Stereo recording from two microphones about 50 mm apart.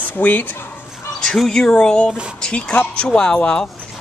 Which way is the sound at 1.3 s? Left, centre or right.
Centre.